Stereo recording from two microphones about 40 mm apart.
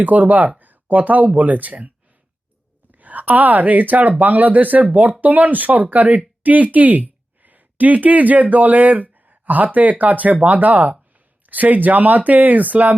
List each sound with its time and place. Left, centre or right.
0.0 s speech: right
2.9 s speech: right